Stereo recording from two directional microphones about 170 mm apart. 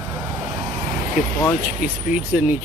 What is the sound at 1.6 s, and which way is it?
Speech, 5° right (ahead or behind).